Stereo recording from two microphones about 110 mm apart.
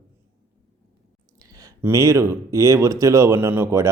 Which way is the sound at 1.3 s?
35° right (ahead or behind).